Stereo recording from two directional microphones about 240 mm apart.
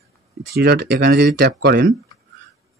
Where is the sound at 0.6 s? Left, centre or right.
Right.